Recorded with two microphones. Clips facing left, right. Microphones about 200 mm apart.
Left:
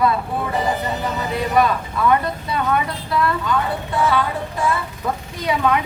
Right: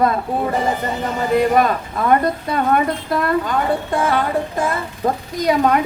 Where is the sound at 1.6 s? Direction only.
45° right (ahead or behind).